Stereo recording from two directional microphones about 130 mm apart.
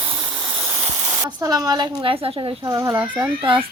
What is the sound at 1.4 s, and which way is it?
A woman's voice, 30° right (ahead or behind).